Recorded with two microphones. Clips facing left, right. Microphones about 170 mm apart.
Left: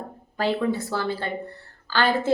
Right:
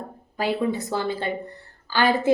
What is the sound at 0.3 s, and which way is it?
A woman's voice, 10° right (ahead or behind).